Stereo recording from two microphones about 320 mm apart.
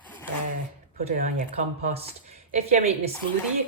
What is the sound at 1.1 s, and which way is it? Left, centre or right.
Speech, right.